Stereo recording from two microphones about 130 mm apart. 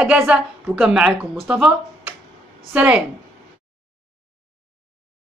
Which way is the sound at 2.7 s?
10° right (ahead or behind).